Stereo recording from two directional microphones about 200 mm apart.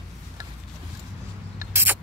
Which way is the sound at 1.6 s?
10° right (ahead or behind).